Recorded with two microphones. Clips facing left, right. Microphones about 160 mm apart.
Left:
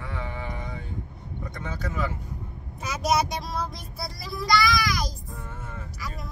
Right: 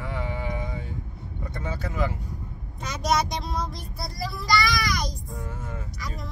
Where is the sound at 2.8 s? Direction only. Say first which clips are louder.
Left 1 dB; 5° left (ahead or behind).